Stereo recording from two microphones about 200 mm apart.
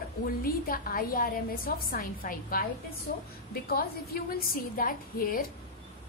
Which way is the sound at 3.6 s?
50° left (ahead or behind).